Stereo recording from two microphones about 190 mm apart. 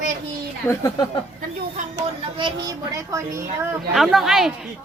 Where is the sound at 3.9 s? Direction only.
Centre (ahead or behind).